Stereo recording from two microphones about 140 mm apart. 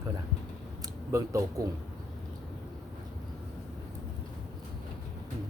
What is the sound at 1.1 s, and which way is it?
Speech, 20° right (ahead or behind).